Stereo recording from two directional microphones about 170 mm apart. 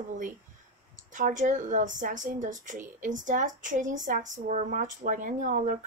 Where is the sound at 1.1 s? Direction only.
50° right (ahead or behind).